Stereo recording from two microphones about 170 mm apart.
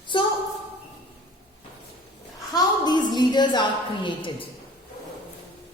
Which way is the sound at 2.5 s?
25° left (ahead or behind).